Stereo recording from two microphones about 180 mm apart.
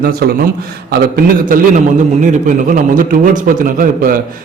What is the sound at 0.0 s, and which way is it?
A man's voice, 60° right (ahead or behind).